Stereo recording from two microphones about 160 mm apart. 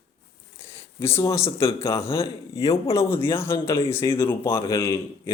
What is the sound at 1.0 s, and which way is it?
Speech, 15° left (ahead or behind).